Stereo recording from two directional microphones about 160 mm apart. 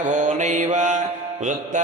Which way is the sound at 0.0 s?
50° right (ahead or behind).